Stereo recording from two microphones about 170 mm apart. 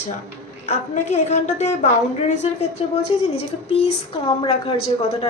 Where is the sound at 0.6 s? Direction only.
45° left (ahead or behind).